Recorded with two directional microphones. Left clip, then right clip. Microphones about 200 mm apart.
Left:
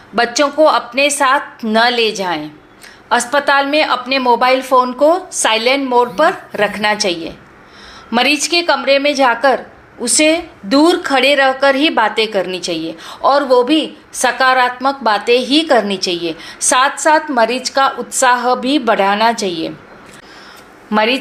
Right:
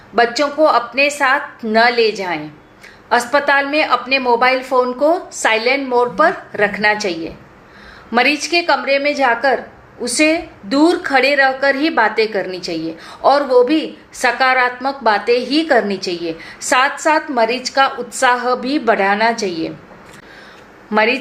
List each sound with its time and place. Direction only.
0.2 s a woman's voice: 25° left (ahead or behind)
20.9 s a woman's voice: 25° left (ahead or behind)